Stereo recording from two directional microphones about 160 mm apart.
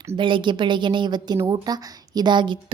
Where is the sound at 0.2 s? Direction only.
30° right (ahead or behind).